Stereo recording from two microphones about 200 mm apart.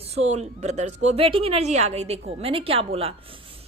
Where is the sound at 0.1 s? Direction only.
30° right (ahead or behind).